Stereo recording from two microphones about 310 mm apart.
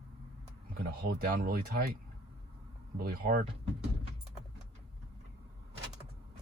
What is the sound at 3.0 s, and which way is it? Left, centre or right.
Speech, right.